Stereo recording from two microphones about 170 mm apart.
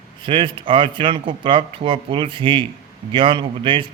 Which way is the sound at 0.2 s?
30° right (ahead or behind).